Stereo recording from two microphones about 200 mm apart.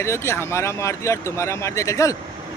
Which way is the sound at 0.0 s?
15° left (ahead or behind).